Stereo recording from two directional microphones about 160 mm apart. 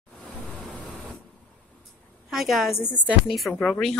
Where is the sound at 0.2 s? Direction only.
Centre (ahead or behind).